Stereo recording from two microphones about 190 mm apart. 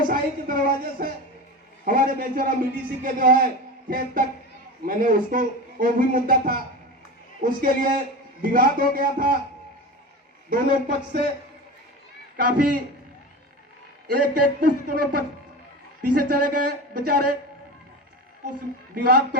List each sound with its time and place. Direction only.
0.1 s a man's voice: 50° right (ahead or behind)
10.5 s a man's voice: 45° right (ahead or behind)
12.4 s a man's voice: 50° right (ahead or behind)
14.1 s a man's voice: 50° right (ahead or behind)
18.9 s a man's voice: 55° right (ahead or behind)